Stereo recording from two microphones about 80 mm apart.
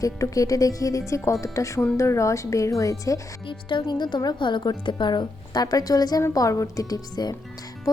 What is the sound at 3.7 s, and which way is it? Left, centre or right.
A woman's voice, left.